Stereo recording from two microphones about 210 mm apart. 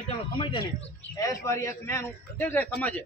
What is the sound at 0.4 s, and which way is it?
A man's voice, 20° left (ahead or behind).